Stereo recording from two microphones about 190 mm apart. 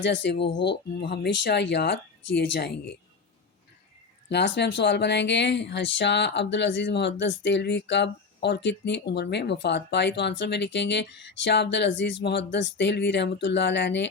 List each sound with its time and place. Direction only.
0.0 s speech: 70° left (ahead or behind)
4.3 s speech: 60° left (ahead or behind)